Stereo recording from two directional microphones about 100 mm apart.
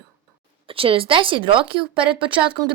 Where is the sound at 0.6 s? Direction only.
65° right (ahead or behind).